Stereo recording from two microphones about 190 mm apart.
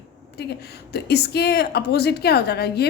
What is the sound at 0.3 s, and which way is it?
A woman's voice, 60° left (ahead or behind).